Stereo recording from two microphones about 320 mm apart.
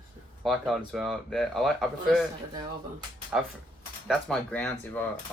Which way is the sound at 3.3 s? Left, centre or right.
Centre.